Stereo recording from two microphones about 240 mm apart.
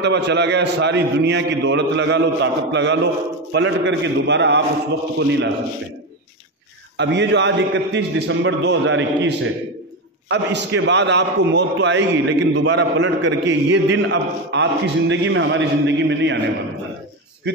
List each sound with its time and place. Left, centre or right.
0.0 s a man's voice: right
7.0 s a man's voice: right